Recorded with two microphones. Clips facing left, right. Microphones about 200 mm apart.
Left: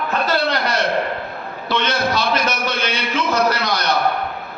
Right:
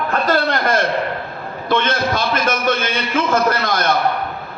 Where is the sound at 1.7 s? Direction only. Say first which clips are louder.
Right 2 dB; 50° right (ahead or behind).